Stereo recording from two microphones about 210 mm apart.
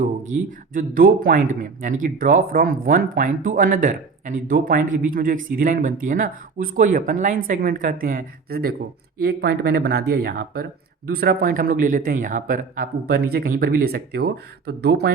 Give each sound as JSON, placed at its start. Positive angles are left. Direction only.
{"t": 0.0, "sound": "speech", "side_deg": -40}